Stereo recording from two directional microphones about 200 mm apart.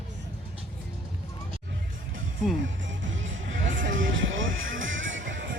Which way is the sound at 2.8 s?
70° right (ahead or behind).